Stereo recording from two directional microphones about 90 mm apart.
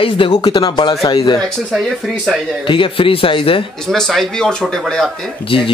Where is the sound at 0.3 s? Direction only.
50° left (ahead or behind).